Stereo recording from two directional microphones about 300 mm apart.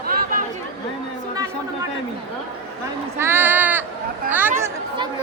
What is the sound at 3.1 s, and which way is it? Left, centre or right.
Speech, centre.